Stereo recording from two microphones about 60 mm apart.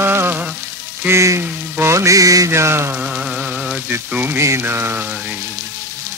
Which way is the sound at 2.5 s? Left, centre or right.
Right.